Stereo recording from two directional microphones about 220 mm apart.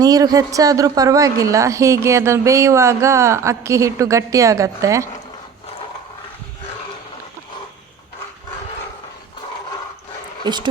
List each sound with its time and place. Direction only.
0.0 s a woman's voice: 15° right (ahead or behind)
10.4 s speech: 20° right (ahead or behind)